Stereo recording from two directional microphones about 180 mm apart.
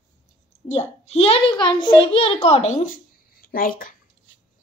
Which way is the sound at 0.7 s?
35° left (ahead or behind).